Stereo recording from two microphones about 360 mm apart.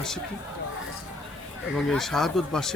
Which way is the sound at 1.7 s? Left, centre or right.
Centre.